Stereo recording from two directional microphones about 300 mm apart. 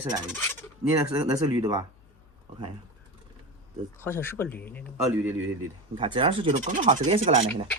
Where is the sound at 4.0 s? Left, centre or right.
Centre.